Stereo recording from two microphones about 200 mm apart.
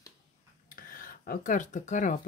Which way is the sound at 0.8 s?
45° left (ahead or behind).